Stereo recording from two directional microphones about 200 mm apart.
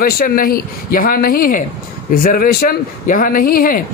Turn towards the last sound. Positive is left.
turn(degrees=45)  # may be behind; listen again after turning